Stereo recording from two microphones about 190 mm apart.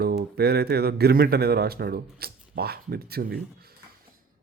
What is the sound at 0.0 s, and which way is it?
Speech, 55° right (ahead or behind).